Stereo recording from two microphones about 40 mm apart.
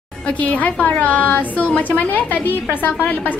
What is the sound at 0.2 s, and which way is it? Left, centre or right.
A woman's voice, left.